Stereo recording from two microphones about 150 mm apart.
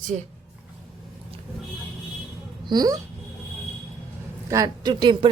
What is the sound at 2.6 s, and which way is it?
Speech, 25° right (ahead or behind).